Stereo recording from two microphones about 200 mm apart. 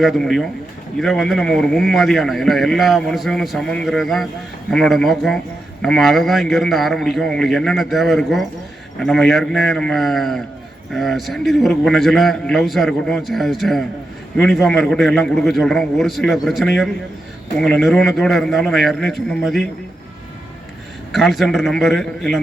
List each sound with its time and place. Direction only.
0.0 s a man's voice: centre (ahead or behind)
21.1 s a man's voice: centre (ahead or behind)